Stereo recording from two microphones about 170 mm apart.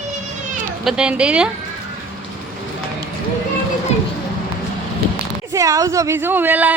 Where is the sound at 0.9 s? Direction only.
5° right (ahead or behind).